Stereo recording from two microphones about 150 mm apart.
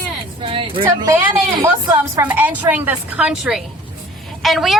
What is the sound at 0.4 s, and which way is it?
Speech, 35° right (ahead or behind).